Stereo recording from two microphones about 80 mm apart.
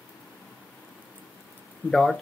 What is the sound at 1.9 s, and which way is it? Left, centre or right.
Speech, centre.